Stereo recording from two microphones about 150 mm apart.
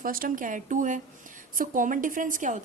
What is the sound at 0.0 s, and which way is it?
A woman's voice, 70° right (ahead or behind).